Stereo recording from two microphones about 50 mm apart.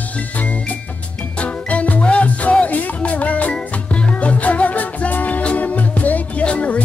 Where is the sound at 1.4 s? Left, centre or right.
Left.